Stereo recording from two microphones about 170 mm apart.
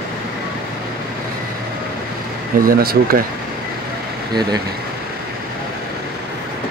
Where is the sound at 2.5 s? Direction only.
60° right (ahead or behind).